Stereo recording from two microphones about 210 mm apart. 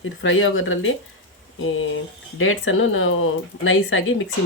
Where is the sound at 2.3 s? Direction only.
70° left (ahead or behind).